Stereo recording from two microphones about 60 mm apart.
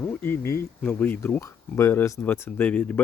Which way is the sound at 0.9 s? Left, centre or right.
Left.